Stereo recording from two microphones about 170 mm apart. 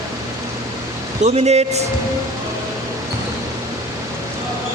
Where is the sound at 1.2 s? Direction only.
40° right (ahead or behind).